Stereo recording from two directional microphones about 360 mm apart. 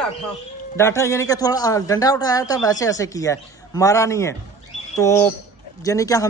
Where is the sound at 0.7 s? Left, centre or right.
Centre.